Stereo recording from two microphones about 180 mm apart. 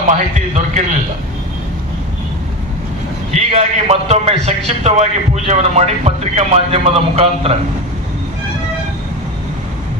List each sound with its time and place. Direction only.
0.1 s a man's voice: 40° right (ahead or behind)
3.3 s a man's voice: 35° right (ahead or behind)